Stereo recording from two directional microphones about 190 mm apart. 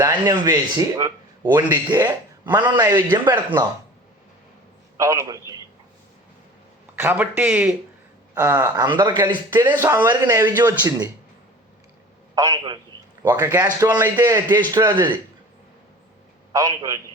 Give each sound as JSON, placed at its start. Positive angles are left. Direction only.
{"t": 0.0, "sound": "a man's voice", "side_deg": -20}
{"t": 4.9, "sound": "a man's voice", "side_deg": -15}
{"t": 6.9, "sound": "a man's voice", "side_deg": -10}
{"t": 12.3, "sound": "a man's voice", "side_deg": -20}
{"t": 16.5, "sound": "a man's voice", "side_deg": -20}